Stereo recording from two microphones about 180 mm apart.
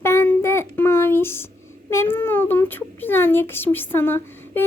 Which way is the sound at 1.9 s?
15° left (ahead or behind).